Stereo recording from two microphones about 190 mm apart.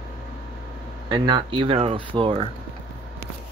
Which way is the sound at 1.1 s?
25° right (ahead or behind).